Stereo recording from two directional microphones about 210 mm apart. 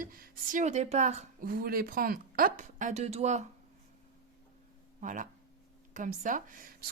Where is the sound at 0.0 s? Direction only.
40° right (ahead or behind).